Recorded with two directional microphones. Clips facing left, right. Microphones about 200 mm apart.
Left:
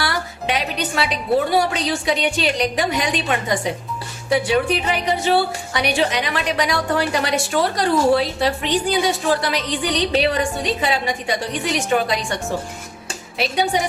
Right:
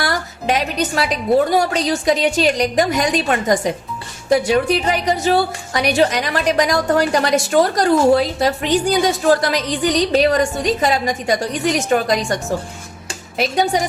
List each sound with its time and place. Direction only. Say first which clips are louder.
0.0 s music: right 3 dB; 45° right (ahead or behind)
1.5 s a woman's voice: right 2 dB; 40° right (ahead or behind)